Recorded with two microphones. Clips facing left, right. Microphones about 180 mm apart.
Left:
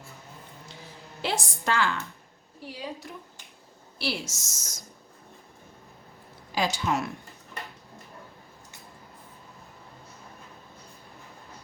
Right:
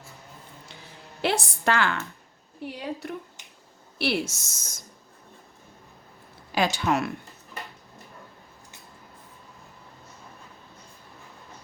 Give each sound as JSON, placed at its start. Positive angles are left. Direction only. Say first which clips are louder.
{"t": 1.2, "sound": "a woman's voice", "louder": "right 5 dB", "side_deg": -60}
{"t": 6.5, "sound": "a woman's voice", "louder": "right 3 dB", "side_deg": -65}